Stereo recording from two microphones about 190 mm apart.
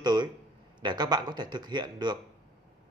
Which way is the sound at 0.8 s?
20° right (ahead or behind).